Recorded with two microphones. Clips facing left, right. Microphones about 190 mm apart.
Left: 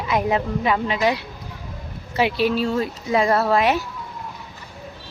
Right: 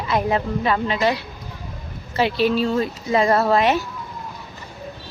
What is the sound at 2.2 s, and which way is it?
Speech, 10° left (ahead or behind).